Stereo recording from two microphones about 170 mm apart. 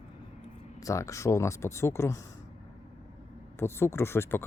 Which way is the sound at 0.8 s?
20° left (ahead or behind).